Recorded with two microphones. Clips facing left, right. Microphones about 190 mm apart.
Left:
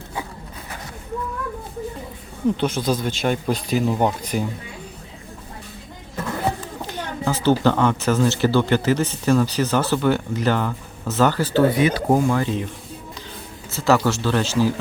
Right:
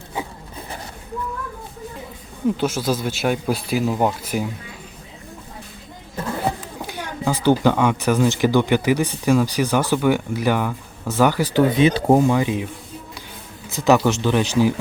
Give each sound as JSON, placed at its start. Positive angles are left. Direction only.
{"t": 2.6, "sound": "speech", "side_deg": -5}
{"t": 6.8, "sound": "speech", "side_deg": -10}